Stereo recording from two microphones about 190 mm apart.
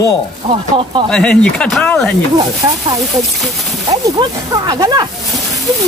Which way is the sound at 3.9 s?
20° right (ahead or behind).